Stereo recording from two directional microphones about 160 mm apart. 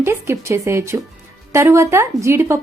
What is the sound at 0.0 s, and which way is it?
Speech, 15° right (ahead or behind).